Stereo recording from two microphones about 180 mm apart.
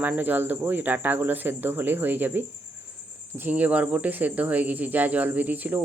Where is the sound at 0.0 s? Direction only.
10° right (ahead or behind).